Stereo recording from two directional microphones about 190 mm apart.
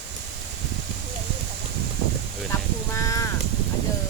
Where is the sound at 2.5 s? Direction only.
15° left (ahead or behind).